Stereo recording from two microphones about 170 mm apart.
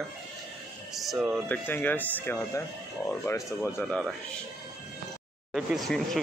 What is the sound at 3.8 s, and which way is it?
Speech, centre (ahead or behind).